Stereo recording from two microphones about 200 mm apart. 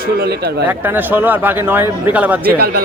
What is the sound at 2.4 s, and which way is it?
Speech, 50° right (ahead or behind).